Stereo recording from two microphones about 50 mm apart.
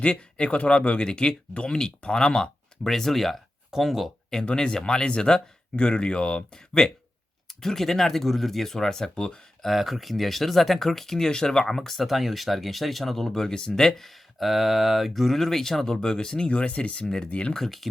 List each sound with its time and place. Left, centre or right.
0.0 s speech: left; by 4.1 s centre
4.4 s speech: centre
9.6 s speech: centre; by 17.5 s left
17.5 s speech: centre